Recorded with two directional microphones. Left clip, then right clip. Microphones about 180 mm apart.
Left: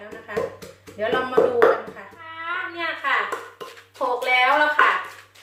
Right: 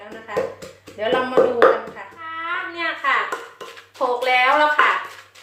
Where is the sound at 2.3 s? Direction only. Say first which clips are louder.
Right 2 dB; 35° right (ahead or behind).